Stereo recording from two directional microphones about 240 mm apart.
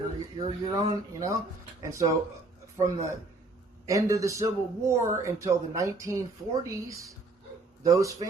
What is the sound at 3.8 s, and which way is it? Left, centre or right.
A man's voice, centre.